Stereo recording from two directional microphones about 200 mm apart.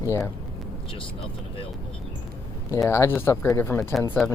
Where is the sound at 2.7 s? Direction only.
15° left (ahead or behind).